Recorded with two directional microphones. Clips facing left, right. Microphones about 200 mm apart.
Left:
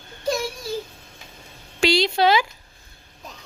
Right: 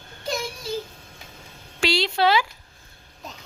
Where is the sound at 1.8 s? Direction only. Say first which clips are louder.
Left 3 dB; 15° left (ahead or behind).